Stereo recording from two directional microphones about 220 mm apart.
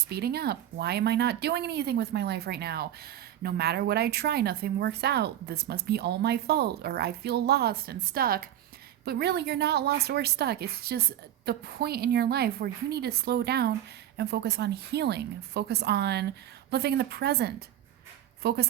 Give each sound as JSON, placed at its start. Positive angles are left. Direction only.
{"t": 0.1, "sound": "speech", "side_deg": -45}